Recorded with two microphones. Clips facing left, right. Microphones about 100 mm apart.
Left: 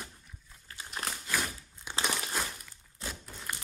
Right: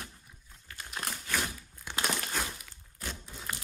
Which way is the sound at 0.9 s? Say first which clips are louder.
Even; 15° left (ahead or behind).